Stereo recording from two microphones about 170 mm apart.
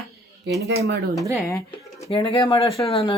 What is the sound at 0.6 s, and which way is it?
Speech, 80° right.